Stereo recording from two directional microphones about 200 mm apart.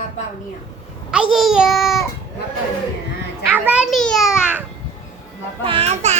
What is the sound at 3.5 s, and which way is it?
Children playing, 10° right (ahead or behind).